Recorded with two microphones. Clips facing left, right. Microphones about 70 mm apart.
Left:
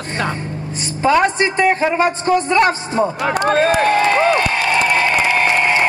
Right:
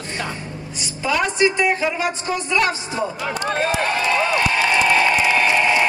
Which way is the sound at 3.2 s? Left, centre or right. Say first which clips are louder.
Left 8 dB; left.